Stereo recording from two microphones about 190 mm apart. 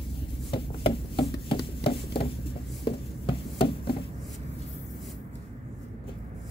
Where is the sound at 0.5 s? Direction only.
30° left (ahead or behind).